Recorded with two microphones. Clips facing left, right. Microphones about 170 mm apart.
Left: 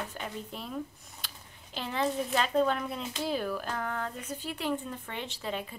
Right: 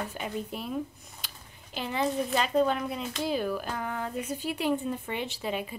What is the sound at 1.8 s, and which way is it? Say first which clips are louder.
Speech: right 2 dB; 5° right (ahead or behind).